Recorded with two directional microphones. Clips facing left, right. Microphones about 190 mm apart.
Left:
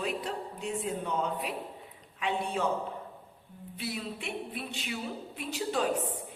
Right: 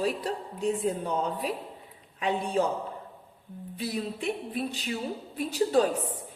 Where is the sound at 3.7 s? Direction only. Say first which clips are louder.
Right 5 dB; 40° right (ahead or behind).